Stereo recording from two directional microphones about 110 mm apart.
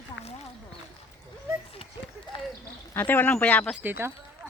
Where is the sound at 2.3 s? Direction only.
50° left (ahead or behind).